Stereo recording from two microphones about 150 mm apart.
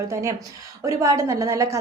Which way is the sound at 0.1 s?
20° right (ahead or behind).